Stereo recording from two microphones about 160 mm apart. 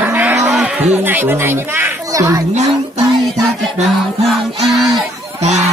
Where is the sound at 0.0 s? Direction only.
10° right (ahead or behind).